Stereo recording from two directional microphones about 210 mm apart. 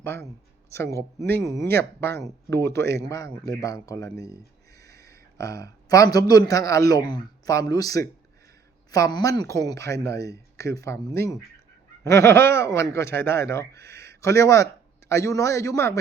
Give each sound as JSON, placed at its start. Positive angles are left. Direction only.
{"t": 0.0, "sound": "speech", "side_deg": 10}
{"t": 4.3, "sound": "a sound", "side_deg": 15}
{"t": 5.4, "sound": "speech", "side_deg": 15}